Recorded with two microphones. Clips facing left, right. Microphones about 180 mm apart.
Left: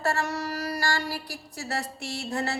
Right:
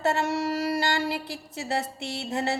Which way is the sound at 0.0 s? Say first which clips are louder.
Right 3 dB; 25° right (ahead or behind).